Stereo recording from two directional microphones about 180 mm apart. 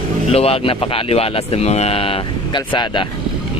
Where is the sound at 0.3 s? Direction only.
35° left (ahead or behind).